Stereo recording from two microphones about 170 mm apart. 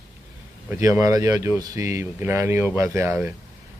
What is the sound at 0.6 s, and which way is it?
Speech, 15° right (ahead or behind).